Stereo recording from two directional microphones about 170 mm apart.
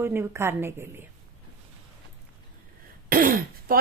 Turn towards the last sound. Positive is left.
turn(degrees=-60)  # may be behind; listen again after turning